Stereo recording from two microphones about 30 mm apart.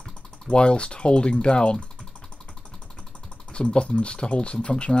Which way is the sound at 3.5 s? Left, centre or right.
Left.